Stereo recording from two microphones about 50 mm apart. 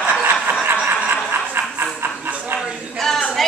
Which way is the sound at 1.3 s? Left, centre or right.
Right.